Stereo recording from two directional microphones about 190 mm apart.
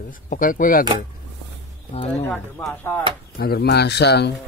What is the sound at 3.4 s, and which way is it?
Speech, 55° left (ahead or behind).